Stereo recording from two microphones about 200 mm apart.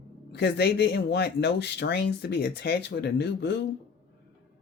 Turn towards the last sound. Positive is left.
turn(degrees=55)  # may be behind; listen again after turning